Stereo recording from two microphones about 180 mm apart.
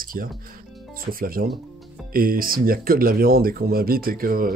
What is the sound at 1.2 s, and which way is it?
Speech, 55° right (ahead or behind).